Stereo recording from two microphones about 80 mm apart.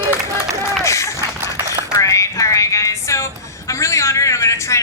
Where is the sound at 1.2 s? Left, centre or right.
Right.